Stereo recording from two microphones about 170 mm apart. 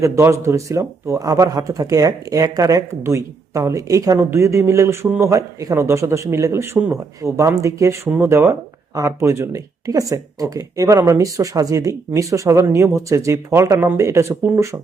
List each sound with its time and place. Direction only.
0.0 s speech: 15° right (ahead or behind)